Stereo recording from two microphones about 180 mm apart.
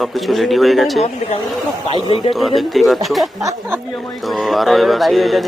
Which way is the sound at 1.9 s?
25° left (ahead or behind).